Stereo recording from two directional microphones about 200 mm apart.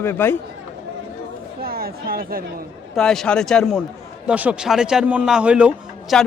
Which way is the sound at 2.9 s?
Centre (ahead or behind).